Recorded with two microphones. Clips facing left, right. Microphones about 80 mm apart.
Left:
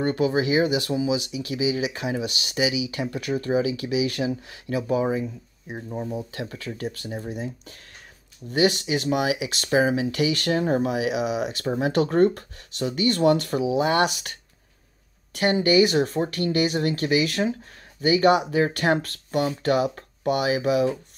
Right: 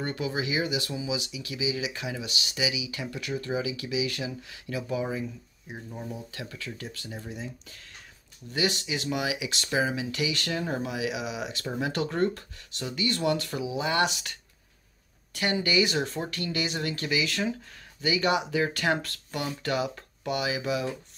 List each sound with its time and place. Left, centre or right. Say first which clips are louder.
0.0 s speech: left 9 dB; left
6.5 s speech: left 7 dB; left